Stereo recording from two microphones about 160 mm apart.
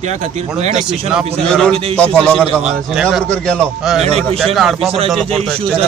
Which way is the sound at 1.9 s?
5° left (ahead or behind).